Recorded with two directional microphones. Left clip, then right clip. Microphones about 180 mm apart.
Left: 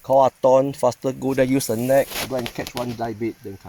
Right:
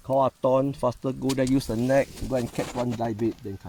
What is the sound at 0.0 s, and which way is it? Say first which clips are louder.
Speech: left 7 dB; 30° left (ahead or behind).